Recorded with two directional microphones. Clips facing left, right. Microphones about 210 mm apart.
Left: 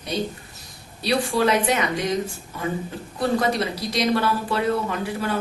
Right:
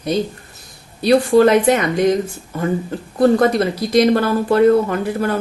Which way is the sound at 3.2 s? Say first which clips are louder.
Right 9 dB; 50° right (ahead or behind).